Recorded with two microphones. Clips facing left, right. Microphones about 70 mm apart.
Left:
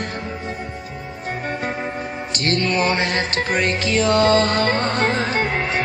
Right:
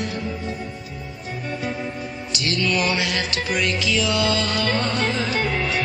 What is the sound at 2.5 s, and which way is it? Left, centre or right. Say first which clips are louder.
Music: left 3 dB; left.